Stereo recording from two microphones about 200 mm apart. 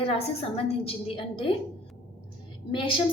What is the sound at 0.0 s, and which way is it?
A woman's voice, 30° left (ahead or behind).